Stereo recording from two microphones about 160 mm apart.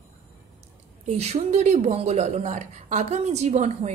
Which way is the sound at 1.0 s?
45° right (ahead or behind).